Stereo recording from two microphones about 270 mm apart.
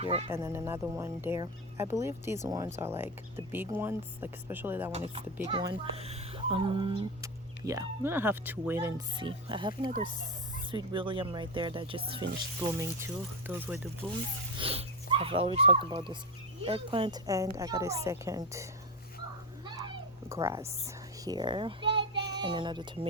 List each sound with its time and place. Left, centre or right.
0.0 s speech: right
0.3 s a child's voice: centre
4.9 s a child's voice: right
13.5 s a child's voice: centre
14.6 s a child's voice: right
19.6 s a sound: centre
20.3 s a child's voice: centre